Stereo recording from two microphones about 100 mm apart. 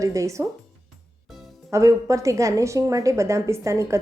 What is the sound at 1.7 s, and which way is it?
A woman's voice, 30° right (ahead or behind).